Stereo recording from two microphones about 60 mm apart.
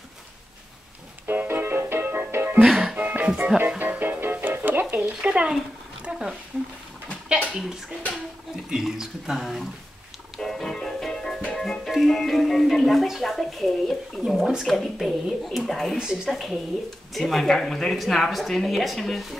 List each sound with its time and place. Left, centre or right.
1.2 s music: right
2.6 s music: centre
3.0 s music: right
5.0 s speech: centre
6.1 s a sound: centre
7.5 s speech: centre
10.3 s music: centre
14.7 s speech: centre